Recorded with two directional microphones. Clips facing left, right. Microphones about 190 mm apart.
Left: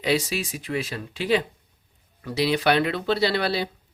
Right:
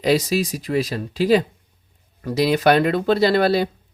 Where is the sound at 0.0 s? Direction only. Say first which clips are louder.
Right 6 dB; 40° right (ahead or behind).